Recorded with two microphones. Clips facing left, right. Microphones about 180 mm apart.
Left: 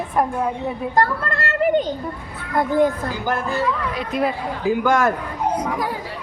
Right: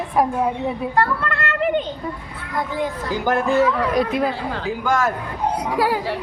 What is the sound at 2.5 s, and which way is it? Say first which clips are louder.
Speech: left 6 dB; 50° left (ahead or behind).